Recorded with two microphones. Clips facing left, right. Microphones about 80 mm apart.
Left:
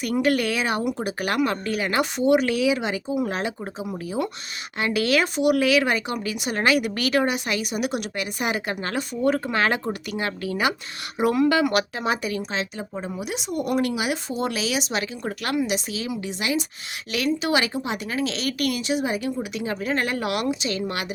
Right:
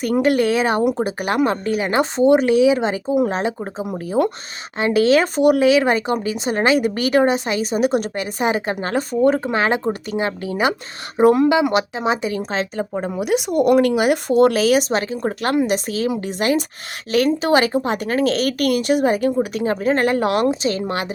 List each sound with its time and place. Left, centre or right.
0.0 s speech: right
3.9 s speech: right
4.8 s speech: right
11.4 s speech: right
12.4 s speech: right
12.9 s speech: right